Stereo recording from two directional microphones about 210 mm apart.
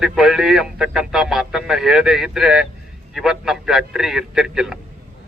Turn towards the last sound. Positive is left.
turn(degrees=-5)  # may be behind; listen again after turning